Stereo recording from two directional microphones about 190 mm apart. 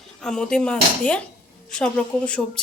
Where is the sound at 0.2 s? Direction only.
5° left (ahead or behind).